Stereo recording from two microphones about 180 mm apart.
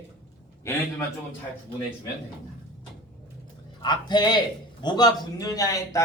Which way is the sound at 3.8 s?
25° left (ahead or behind).